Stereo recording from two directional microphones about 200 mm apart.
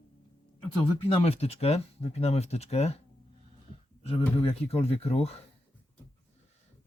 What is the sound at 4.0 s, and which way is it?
Speech, 30° left (ahead or behind).